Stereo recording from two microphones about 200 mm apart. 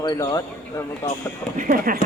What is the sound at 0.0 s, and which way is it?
Speech, 20° left (ahead or behind).